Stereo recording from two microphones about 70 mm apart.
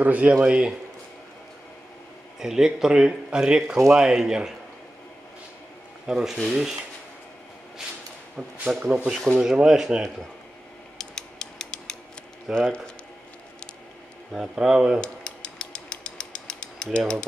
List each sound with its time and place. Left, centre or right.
0.0 s a man's voice: right
2.4 s speech: centre
6.0 s speech: centre
8.4 s speech: centre
11.0 s mechanisms: centre
12.5 s speech: centre
14.3 s speech: centre
15.0 s mechanisms: centre